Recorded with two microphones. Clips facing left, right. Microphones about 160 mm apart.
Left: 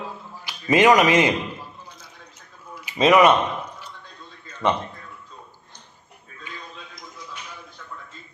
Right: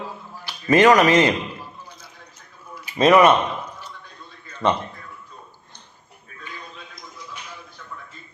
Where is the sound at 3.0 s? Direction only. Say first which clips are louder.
Right 1 dB; centre (ahead or behind).